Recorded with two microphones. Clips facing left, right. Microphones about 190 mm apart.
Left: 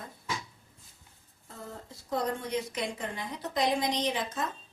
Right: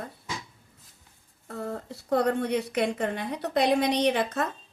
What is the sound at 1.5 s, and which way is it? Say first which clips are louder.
A woman's voice: right 10 dB; 65° right (ahead or behind).